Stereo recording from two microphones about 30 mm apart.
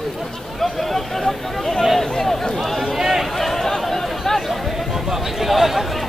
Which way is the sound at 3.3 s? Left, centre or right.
Centre.